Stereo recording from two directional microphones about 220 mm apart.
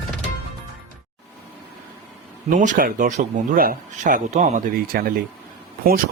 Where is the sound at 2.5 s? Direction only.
35° right (ahead or behind).